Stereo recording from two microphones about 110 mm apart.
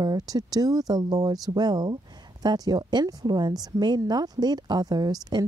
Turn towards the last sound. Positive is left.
turn(degrees=-35)  # may be behind; listen again after turning